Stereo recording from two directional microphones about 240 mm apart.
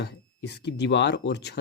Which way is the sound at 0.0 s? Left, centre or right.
Left.